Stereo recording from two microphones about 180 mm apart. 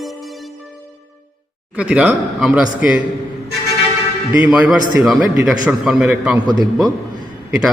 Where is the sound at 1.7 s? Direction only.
5° right (ahead or behind).